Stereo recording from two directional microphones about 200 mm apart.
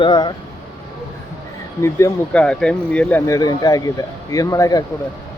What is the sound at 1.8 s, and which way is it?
Speech, 15° left (ahead or behind).